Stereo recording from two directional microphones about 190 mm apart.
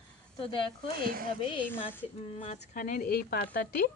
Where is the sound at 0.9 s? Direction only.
50° right (ahead or behind).